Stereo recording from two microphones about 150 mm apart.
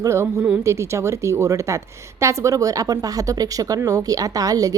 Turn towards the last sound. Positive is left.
turn(degrees=-25)  # may be behind; listen again after turning